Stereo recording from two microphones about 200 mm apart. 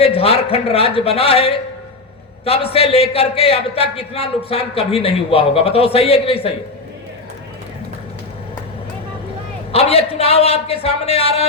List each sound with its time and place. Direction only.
0.0 s a man's voice: 30° left (ahead or behind)
9.7 s a man's voice: 30° left (ahead or behind)